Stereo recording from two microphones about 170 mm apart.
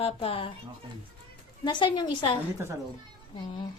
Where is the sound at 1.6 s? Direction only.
25° left (ahead or behind).